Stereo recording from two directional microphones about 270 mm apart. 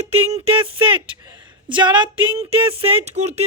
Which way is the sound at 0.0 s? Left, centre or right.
Right.